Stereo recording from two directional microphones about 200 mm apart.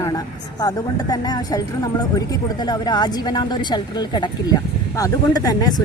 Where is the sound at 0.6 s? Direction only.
20° left (ahead or behind).